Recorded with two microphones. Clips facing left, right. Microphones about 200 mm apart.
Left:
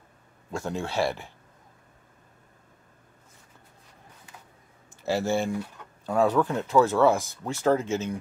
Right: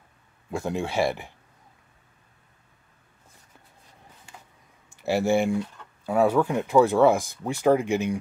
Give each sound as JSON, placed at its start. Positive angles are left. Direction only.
{"t": 0.5, "sound": "speech", "side_deg": -15}
{"t": 5.0, "sound": "speech", "side_deg": -15}